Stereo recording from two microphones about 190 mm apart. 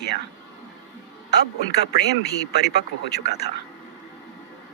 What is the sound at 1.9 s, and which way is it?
Speech, 60° left (ahead or behind).